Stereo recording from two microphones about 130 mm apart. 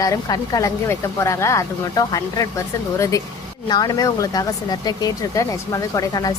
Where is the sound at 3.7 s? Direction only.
30° left (ahead or behind).